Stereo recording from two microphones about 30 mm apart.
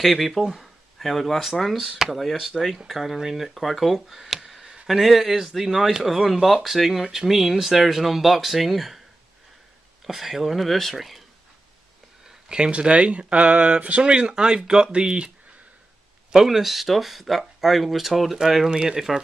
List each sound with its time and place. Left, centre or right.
0.0 s speech: centre
2.3 s speech: centre
3.5 s speech: centre
10.0 s speech: centre
12.4 s speech: right
12.7 s speech: right
14.0 s speech: right
16.4 s speech: centre
18.7 s speech: right